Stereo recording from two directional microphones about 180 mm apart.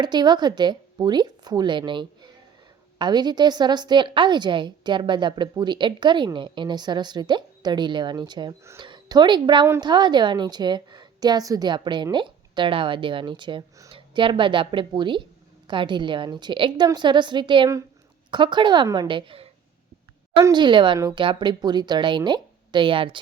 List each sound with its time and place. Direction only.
0.0 s a woman's voice: 25° right (ahead or behind)
9.6 s a woman's voice: 15° right (ahead or behind)
9.9 s a woman's voice: 25° right (ahead or behind)